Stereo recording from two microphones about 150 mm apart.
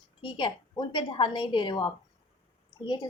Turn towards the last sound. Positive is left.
turn(degrees=30)  # may be behind; listen again after turning